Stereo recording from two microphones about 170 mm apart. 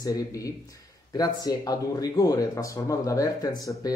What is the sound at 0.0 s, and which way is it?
A man's voice, 20° left (ahead or behind).